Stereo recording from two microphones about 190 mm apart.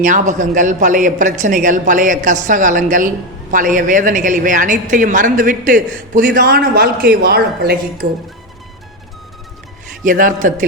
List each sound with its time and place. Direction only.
0.0 s a woman's voice: 40° right (ahead or behind)
10.0 s a woman's voice: 45° right (ahead or behind)